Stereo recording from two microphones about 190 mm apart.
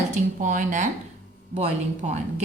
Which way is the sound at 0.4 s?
40° right (ahead or behind).